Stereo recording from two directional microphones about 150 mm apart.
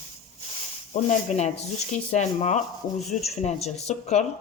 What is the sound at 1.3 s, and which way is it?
Speech, 55° left (ahead or behind).